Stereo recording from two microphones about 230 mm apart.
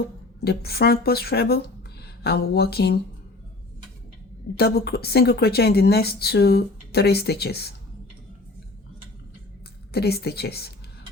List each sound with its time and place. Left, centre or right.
0.4 s speech: left
4.5 s speech: left
9.9 s speech: left